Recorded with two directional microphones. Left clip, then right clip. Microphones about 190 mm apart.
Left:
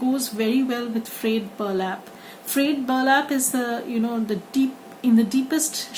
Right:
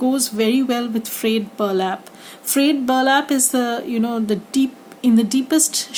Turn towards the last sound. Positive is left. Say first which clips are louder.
# right 6 dB
turn(degrees=-45)  # may be behind; listen again after turning